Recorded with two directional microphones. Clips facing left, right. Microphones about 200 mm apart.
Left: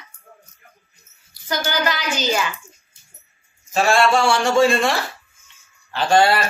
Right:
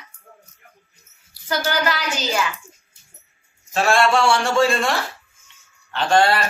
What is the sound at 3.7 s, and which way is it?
A woman's voice, centre (ahead or behind).